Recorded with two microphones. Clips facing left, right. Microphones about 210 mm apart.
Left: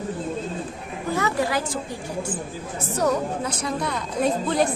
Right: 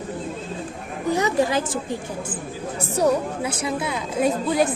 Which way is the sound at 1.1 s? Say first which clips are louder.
Right 3 dB; 20° right (ahead or behind).